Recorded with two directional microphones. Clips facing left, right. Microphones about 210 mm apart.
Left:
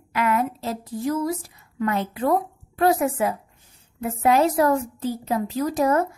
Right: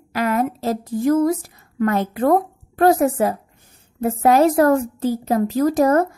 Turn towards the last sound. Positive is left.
turn(degrees=-45)  # may be behind; listen again after turning